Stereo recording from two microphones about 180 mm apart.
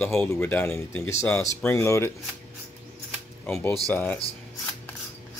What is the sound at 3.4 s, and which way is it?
Speech, 10° left (ahead or behind).